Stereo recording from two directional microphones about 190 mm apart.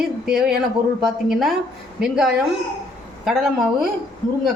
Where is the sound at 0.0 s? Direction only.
Centre (ahead or behind).